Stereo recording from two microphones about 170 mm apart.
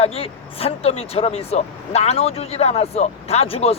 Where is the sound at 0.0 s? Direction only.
35° left (ahead or behind).